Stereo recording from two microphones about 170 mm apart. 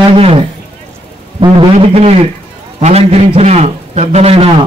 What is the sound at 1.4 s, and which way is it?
Music, 30° right (ahead or behind).